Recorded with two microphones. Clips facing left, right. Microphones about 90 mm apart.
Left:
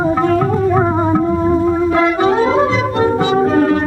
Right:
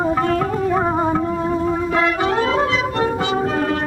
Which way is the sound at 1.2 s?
15° left (ahead or behind).